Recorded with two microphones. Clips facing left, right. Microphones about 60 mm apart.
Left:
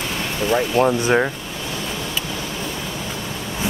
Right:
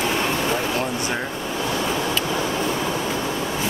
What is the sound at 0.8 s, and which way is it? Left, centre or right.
Speech, left.